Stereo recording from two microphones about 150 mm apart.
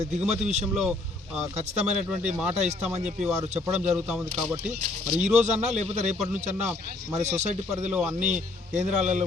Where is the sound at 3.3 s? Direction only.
20° right (ahead or behind).